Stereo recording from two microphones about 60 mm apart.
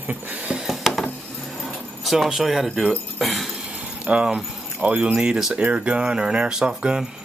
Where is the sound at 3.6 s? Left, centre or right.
Right.